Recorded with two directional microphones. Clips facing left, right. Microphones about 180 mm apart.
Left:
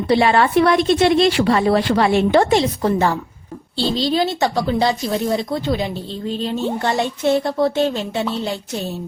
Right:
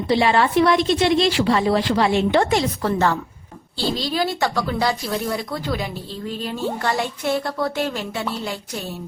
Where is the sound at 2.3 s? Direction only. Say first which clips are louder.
Left 4 dB; 30° left (ahead or behind).